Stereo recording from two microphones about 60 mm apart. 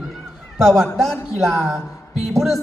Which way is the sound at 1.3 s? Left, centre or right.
Centre.